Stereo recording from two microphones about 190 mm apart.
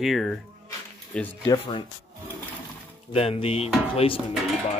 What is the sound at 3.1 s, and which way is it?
Speech, 30° left (ahead or behind).